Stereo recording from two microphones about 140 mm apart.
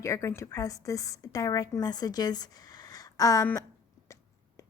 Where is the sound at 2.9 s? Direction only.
25° left (ahead or behind).